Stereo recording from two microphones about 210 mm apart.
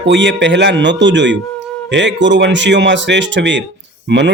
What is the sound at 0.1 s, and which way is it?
Speech, 60° right (ahead or behind).